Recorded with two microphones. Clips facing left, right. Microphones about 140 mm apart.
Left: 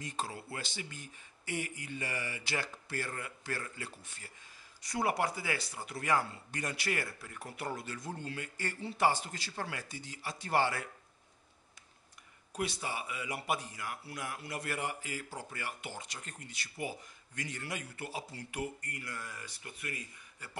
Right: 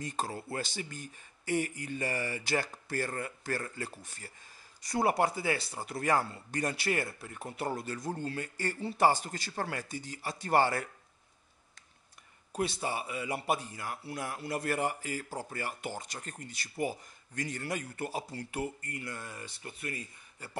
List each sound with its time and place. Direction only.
0.0 s speech: 40° right (ahead or behind)
12.5 s speech: 30° right (ahead or behind)
18.6 s speech: 25° right (ahead or behind)